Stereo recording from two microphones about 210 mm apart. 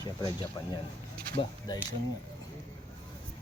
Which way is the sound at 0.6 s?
15° left (ahead or behind).